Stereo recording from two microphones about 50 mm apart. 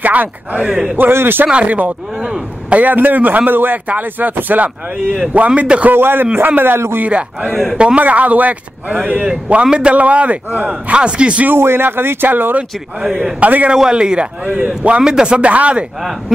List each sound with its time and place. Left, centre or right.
0.0 s speech: right
0.6 s speech: centre
0.9 s speech: right
1.5 s a man's voice: right
2.8 s a man's voice: right
5.9 s speech: right
7.1 s a man's voice: right
11.4 s speech: right
13.0 s speech: centre
13.4 s speech: right
13.7 s a man's voice: centre
16.0 s speech: centre